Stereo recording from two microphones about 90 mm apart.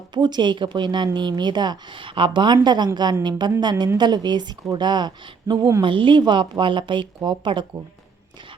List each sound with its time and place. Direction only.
0.1 s a woman's voice: 55° right (ahead or behind)